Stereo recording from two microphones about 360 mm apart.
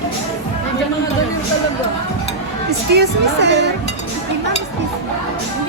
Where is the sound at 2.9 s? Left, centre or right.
Right.